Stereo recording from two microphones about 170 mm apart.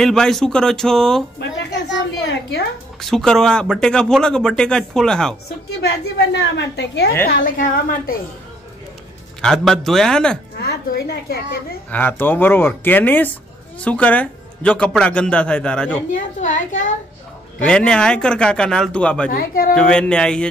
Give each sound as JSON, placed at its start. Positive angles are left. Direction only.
{"t": 0.0, "sound": "speech", "side_deg": 5}
{"t": 1.4, "sound": "a sound", "side_deg": 90}
{"t": 3.0, "sound": "speech", "side_deg": 0}
{"t": 5.7, "sound": "a woman's voice", "side_deg": 75}
{"t": 7.4, "sound": "a woman's voice", "side_deg": 50}
{"t": 9.4, "sound": "speech", "side_deg": 0}
{"t": 10.6, "sound": "a woman's voice", "side_deg": 70}
{"t": 11.9, "sound": "speech", "side_deg": 10}
{"t": 16.2, "sound": "a woman's voice", "side_deg": 45}
{"t": 17.6, "sound": "speech", "side_deg": 5}
{"t": 19.3, "sound": "a woman's voice", "side_deg": 60}
{"t": 19.7, "sound": "speech", "side_deg": 5}